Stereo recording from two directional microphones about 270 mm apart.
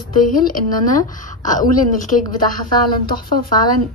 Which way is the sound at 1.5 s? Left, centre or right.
Left.